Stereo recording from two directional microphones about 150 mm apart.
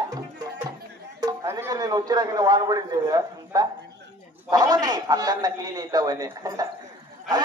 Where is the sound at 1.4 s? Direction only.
20° right (ahead or behind).